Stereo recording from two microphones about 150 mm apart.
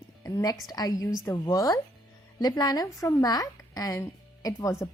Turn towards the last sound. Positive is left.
turn(degrees=20)  # may be behind; listen again after turning